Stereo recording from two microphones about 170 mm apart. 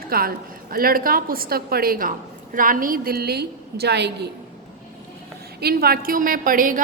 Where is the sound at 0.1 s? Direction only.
60° right (ahead or behind); by 4.3 s 80° right.